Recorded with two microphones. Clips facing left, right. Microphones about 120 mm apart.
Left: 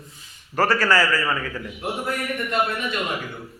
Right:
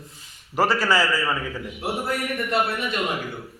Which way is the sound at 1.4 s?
10° right (ahead or behind).